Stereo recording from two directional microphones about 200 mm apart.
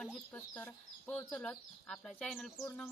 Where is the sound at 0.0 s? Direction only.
5° left (ahead or behind).